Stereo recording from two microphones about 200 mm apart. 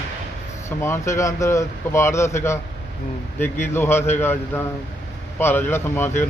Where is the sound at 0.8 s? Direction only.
15° left (ahead or behind).